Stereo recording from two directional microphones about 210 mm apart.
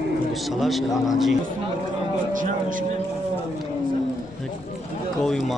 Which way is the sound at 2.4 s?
40° right (ahead or behind).